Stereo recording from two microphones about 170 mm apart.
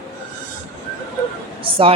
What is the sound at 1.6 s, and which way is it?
Speech, 30° right (ahead or behind).